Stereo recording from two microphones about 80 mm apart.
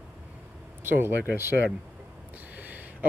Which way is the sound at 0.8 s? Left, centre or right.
Right.